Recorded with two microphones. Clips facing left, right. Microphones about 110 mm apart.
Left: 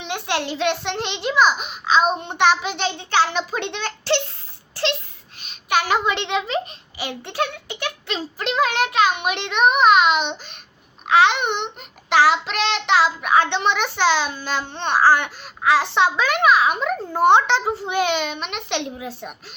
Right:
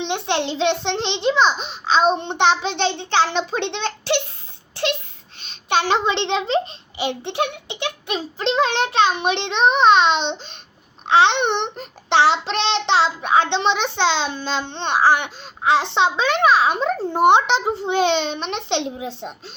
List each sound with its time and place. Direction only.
0.0 s child singing: 25° right (ahead or behind)
4.7 s a sound: 15° right (ahead or behind)
5.4 s child singing: 30° right (ahead or behind)
17.1 s child singing: 20° right (ahead or behind)